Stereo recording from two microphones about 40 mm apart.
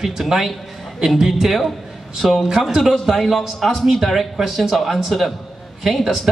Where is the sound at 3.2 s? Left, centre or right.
Centre.